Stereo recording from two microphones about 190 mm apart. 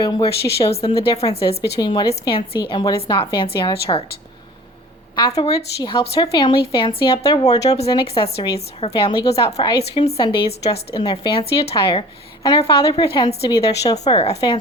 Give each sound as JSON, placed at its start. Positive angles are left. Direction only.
{"t": 0.0, "sound": "speech", "side_deg": 20}
{"t": 0.7, "sound": "speech", "side_deg": 30}
{"t": 5.1, "sound": "a woman's voice", "side_deg": 25}
{"t": 10.2, "sound": "a woman's voice", "side_deg": 20}